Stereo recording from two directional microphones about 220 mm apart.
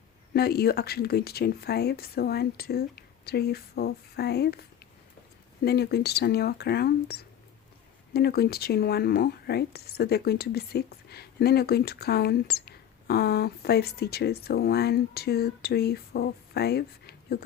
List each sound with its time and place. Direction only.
0.3 s speech: 45° left (ahead or behind)
5.6 s speech: 45° left (ahead or behind)